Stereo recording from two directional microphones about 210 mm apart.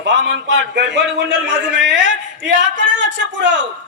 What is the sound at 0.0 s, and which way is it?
A man's voice, 55° right (ahead or behind).